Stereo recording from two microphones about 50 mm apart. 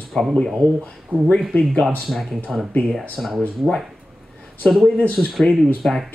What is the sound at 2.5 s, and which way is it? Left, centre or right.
Speech, centre.